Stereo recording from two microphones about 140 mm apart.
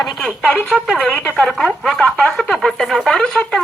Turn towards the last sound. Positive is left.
turn(degrees=5)  # may be behind; listen again after turning